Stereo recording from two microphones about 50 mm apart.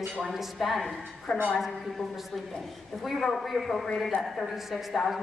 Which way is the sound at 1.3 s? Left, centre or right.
Centre.